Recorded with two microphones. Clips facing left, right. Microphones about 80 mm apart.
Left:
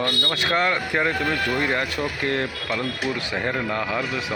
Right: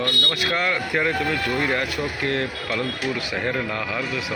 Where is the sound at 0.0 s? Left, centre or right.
Left.